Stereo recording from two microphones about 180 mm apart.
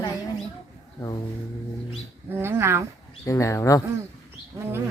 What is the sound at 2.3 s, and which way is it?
Speech, 15° right (ahead or behind).